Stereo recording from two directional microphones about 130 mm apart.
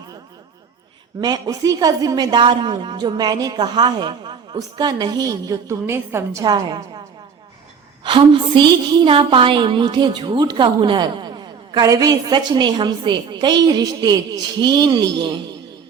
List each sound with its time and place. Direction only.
1.2 s a woman's voice: 30° right (ahead or behind)
6.4 s a woman's voice: 30° right (ahead or behind)
8.0 s a woman's voice: 40° right (ahead or behind)